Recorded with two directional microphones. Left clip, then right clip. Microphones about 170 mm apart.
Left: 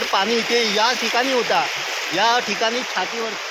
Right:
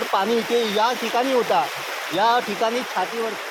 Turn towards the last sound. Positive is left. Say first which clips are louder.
# left 1 dB
turn(degrees=5)  # may be behind; listen again after turning